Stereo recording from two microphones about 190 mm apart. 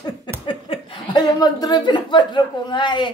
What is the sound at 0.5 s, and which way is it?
Speech, 25° left (ahead or behind).